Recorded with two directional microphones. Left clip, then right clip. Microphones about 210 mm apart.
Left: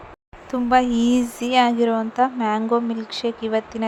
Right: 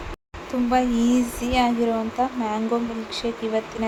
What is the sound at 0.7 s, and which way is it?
Speech, 35° left (ahead or behind).